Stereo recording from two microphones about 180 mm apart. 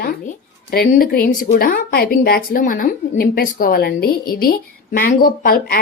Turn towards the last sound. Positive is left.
turn(degrees=55)  # may be behind; listen again after turning